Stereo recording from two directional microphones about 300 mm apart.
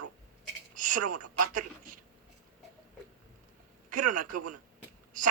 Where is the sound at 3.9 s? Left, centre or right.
Right.